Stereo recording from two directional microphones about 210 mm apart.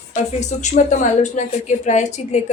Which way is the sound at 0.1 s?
35° left (ahead or behind).